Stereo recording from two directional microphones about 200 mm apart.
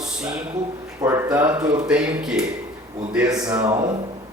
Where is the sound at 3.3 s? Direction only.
15° right (ahead or behind).